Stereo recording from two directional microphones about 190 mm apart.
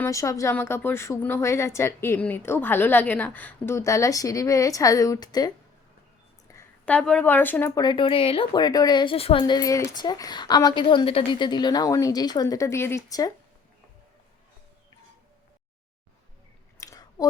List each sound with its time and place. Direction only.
0.0 s speech: 15° left (ahead or behind)
6.5 s speech: 10° left (ahead or behind)
7.9 s a woman's voice: 25° left (ahead or behind)
16.8 s chewing: 20° left (ahead or behind)